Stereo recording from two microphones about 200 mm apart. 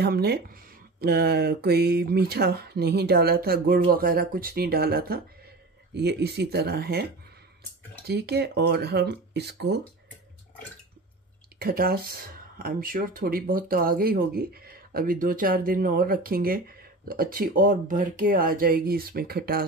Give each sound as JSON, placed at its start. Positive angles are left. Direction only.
{"t": 0.0, "sound": "speech", "side_deg": -50}
{"t": 8.1, "sound": "speech", "side_deg": -55}
{"t": 11.6, "sound": "speech", "side_deg": -50}